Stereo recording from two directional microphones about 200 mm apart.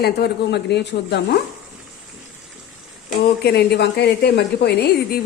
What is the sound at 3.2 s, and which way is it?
Speech, 55° left (ahead or behind).